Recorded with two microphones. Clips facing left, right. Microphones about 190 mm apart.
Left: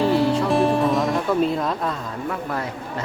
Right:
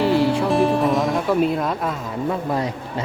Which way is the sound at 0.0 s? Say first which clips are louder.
Right 1 dB; centre (ahead or behind).